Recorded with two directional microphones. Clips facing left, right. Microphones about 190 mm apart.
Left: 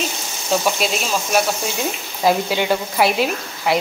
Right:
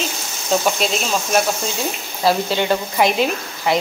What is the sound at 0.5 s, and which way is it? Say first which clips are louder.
Speech: right 1 dB; 5° left (ahead or behind).